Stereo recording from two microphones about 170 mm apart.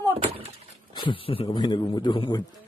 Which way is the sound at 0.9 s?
30° left (ahead or behind).